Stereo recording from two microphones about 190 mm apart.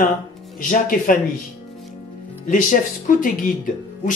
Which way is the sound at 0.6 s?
45° left (ahead or behind).